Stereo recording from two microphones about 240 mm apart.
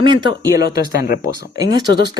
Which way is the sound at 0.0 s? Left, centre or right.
Centre.